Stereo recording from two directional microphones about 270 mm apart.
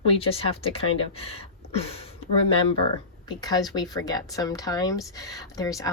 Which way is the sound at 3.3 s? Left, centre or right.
Centre.